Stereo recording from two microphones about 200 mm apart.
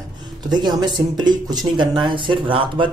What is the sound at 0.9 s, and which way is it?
Speech, 20° right (ahead or behind).